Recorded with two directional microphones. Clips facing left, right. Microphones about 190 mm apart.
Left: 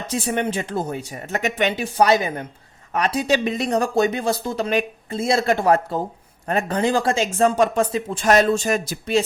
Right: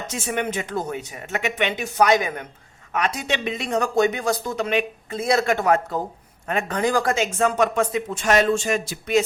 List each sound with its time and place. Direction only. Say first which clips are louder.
0.1 s speech: left 4 dB; 35° left (ahead or behind)